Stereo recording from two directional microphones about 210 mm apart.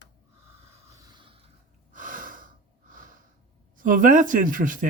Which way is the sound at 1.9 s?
40° right (ahead or behind).